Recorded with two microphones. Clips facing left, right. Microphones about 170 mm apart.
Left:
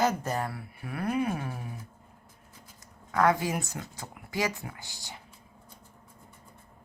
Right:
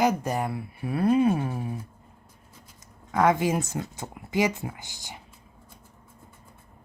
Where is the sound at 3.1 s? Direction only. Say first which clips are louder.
Right 3 dB; 20° right (ahead or behind).